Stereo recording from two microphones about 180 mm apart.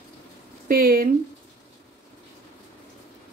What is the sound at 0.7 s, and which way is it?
Speech, 55° right (ahead or behind).